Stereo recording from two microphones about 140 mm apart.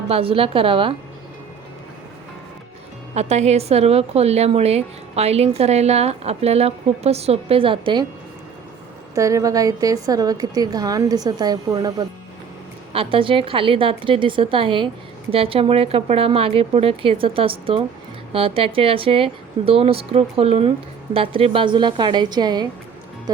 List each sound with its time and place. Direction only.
0.1 s speech: 40° right (ahead or behind)
3.2 s a woman's voice: 50° right (ahead or behind)
9.1 s a woman's voice: 25° right (ahead or behind)
12.9 s a woman's voice: 40° right (ahead or behind)